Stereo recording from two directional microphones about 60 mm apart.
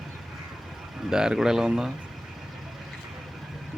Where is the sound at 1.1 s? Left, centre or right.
Centre.